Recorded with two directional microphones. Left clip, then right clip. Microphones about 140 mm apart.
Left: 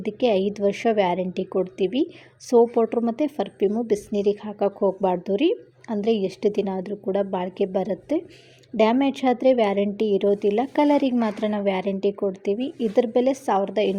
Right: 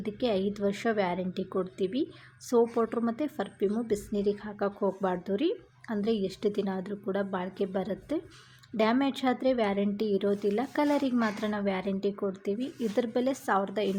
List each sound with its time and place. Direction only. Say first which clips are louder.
0.0 s a woman's voice: left 8 dB; 20° left (ahead or behind)